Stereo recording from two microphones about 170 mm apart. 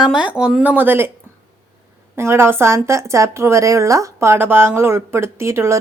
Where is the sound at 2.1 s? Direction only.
15° right (ahead or behind).